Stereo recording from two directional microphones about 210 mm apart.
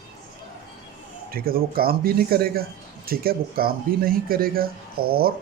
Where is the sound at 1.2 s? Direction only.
45° right (ahead or behind).